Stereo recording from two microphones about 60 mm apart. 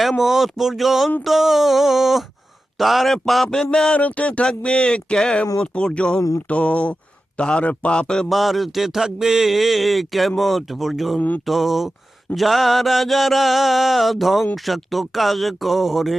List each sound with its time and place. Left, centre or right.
0.0 s speech: centre
6.1 s a sound: left
6.5 s speech: centre
8.3 s speech: centre